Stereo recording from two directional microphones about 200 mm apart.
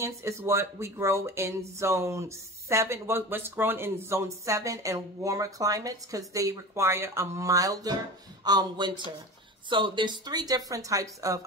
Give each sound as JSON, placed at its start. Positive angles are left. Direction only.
{"t": 0.0, "sound": "speech", "side_deg": -15}